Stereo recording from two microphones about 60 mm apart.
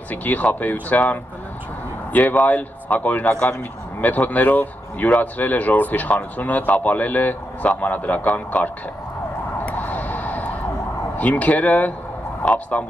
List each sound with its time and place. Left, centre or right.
0.1 s speech: left
9.7 s a sound: left
11.1 s speech: left